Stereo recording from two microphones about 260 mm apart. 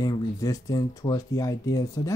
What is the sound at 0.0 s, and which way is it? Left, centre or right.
Speech, centre.